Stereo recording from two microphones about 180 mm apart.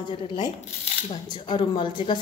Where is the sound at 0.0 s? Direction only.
25° left (ahead or behind).